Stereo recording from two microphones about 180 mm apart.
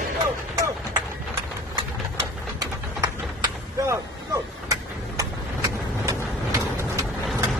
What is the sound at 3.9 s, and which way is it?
Vehicle, 15° right (ahead or behind).